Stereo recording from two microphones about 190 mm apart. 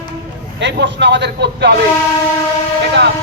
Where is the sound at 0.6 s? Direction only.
70° right (ahead or behind).